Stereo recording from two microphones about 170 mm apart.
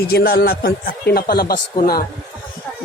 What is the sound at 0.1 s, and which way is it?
Speech, 70° left (ahead or behind).